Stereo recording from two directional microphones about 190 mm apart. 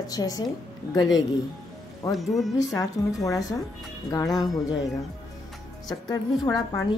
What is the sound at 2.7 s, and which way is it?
A woman's voice, 15° left (ahead or behind).